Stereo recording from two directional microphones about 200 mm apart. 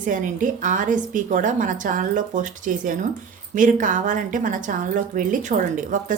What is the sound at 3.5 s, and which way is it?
A woman's voice, 40° right (ahead or behind).